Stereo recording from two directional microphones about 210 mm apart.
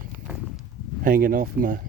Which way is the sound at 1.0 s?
45° right (ahead or behind).